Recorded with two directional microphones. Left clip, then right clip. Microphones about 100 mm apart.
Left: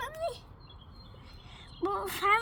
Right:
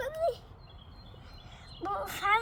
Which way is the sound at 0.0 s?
5° right (ahead or behind).